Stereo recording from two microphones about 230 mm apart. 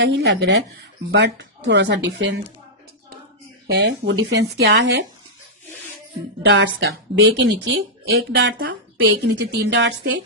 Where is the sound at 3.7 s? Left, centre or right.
Right.